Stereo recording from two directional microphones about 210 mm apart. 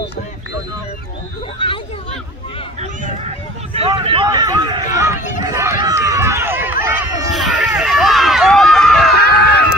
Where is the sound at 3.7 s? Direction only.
25° right (ahead or behind).